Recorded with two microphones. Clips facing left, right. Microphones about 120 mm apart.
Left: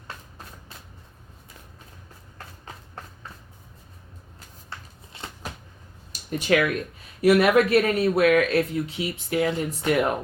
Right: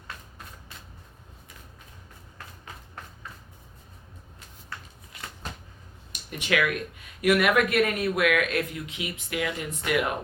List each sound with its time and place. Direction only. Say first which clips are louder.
4.7 s shuffling cards: left 1 dB; 30° left (ahead or behind)
5.1 s a sound: left 2 dB; 30° left (ahead or behind)
7.2 s speech: left 4 dB; 30° left (ahead or behind)